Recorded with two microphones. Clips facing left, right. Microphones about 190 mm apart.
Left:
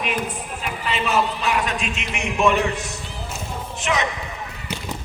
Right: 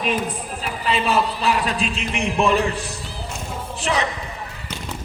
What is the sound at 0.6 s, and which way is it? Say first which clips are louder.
A man's voice: right 3 dB; 35° right (ahead or behind).